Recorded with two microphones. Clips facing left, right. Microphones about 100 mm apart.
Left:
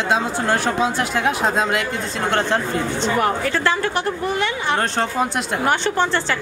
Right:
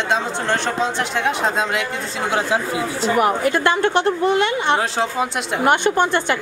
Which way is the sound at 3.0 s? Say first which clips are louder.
Right 4 dB; 10° right (ahead or behind).